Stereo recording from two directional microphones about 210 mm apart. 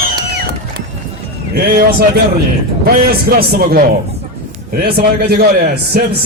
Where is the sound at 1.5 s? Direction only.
50° right (ahead or behind).